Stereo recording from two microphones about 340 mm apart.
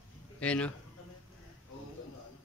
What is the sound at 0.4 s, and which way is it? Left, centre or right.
Speech, centre.